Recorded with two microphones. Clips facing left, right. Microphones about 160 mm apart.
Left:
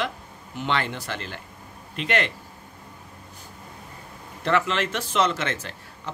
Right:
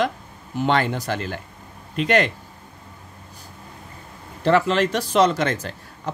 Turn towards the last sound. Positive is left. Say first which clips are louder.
# right 6 dB
turn(degrees=-40)  # may be behind; listen again after turning